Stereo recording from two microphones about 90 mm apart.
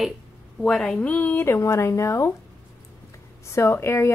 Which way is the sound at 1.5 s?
35° left (ahead or behind).